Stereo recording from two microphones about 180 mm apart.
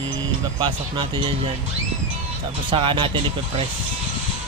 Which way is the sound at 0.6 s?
25° right (ahead or behind).